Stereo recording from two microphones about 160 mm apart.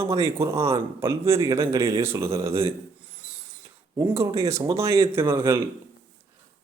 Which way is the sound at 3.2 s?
10° right (ahead or behind).